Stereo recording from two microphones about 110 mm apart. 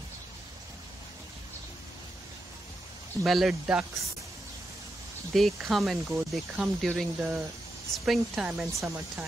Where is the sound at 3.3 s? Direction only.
Centre (ahead or behind).